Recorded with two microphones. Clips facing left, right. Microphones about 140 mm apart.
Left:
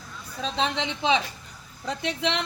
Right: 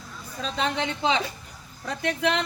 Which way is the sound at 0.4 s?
20° left (ahead or behind).